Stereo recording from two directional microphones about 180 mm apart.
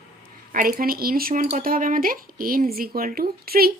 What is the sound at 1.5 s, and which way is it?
Speech, 50° right (ahead or behind).